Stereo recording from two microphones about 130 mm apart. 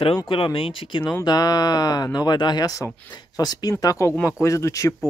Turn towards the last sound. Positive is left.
turn(degrees=25)  # may be behind; listen again after turning